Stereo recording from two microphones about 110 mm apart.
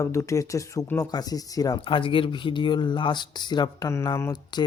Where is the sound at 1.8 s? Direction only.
50° left (ahead or behind).